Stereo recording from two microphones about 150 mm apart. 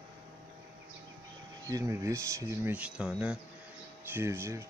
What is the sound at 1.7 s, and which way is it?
Speech, 25° right (ahead or behind).